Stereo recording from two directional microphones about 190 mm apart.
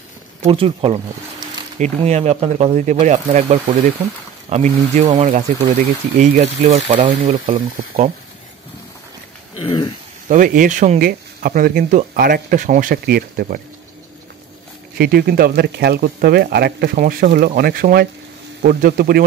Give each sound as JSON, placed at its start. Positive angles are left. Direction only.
{"t": 0.4, "sound": "speech", "side_deg": -30}
{"t": 9.6, "sound": "a sound", "side_deg": 25}
{"t": 10.2, "sound": "speech", "side_deg": -45}
{"t": 15.0, "sound": "speech", "side_deg": -55}